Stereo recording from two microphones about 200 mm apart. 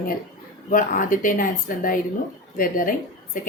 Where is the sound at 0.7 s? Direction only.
40° left (ahead or behind).